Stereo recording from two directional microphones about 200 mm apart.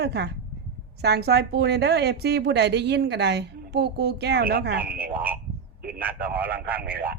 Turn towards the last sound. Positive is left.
turn(degrees=-50)  # may be behind; listen again after turning